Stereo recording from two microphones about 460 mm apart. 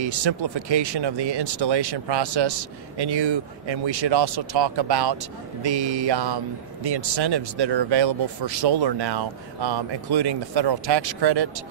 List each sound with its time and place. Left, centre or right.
0.0 s speech: right